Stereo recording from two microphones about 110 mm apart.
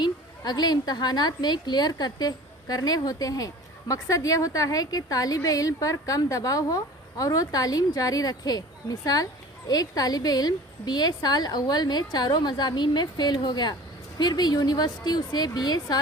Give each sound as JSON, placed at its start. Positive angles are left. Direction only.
{"t": 0.0, "sound": "a woman's voice", "side_deg": 40}